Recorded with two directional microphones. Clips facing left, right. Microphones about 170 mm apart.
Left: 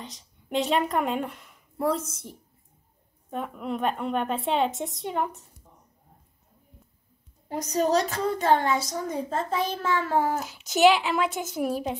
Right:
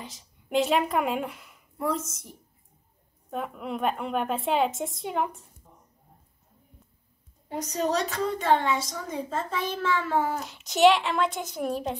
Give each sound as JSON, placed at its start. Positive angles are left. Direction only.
{"t": 0.0, "sound": "speech", "side_deg": 0}
{"t": 1.8, "sound": "a woman's voice", "side_deg": 30}
{"t": 3.3, "sound": "a woman's voice", "side_deg": 0}
{"t": 7.4, "sound": "a woman's voice", "side_deg": 40}
{"t": 10.4, "sound": "a woman's voice", "side_deg": 5}